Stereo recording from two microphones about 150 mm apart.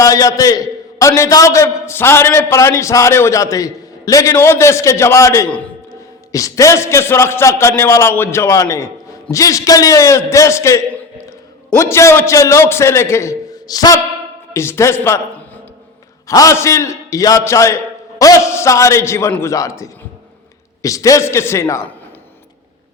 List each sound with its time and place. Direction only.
0.0 s a man's voice: 20° left (ahead or behind)
16.2 s a man's voice: 20° left (ahead or behind)